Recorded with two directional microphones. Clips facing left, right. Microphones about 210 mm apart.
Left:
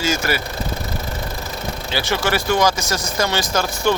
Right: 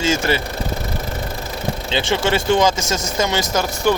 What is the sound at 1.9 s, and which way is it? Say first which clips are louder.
Speech: right 2 dB; 25° right (ahead or behind).